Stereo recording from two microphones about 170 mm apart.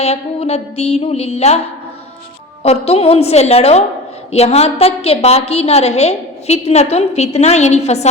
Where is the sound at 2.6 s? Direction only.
35° left (ahead or behind).